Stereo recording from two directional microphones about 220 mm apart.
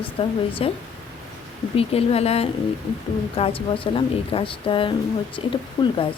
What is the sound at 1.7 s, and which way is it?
A woman's voice, 25° left (ahead or behind).